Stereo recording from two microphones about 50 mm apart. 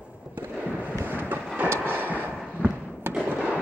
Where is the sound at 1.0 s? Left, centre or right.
Right.